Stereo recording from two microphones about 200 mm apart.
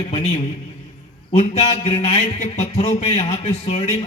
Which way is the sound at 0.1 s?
30° left (ahead or behind).